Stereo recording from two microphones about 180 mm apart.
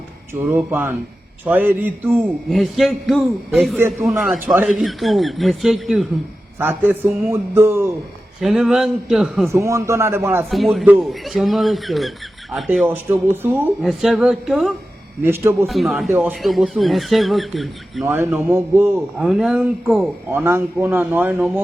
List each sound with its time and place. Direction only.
0.3 s a man's voice: 10° right (ahead or behind)
2.5 s speech: centre (ahead or behind)
6.6 s a man's voice: 10° right (ahead or behind)
8.4 s speech: centre (ahead or behind)
9.5 s a man's voice: 15° right (ahead or behind)
10.5 s speech: centre (ahead or behind)
12.6 s a man's voice: 10° right (ahead or behind)
13.8 s speech: centre (ahead or behind)
15.2 s a man's voice: 10° right (ahead or behind)
15.6 s speech: centre (ahead or behind)
18.0 s a man's voice: 15° right (ahead or behind)